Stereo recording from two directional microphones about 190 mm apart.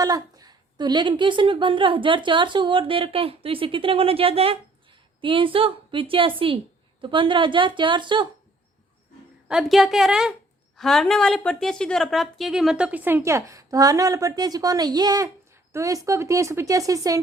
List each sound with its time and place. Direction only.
0.0 s a woman's voice: 20° right (ahead or behind)
9.5 s a woman's voice: centre (ahead or behind); by 17.2 s 20° right (ahead or behind)